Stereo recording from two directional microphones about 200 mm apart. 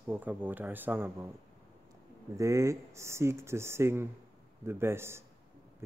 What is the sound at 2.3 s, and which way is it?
Speech, 15° right (ahead or behind).